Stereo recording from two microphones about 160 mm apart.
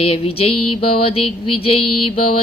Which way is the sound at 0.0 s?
35° left (ahead or behind).